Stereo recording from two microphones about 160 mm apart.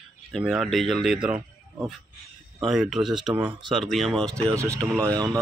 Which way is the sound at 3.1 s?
30° right (ahead or behind).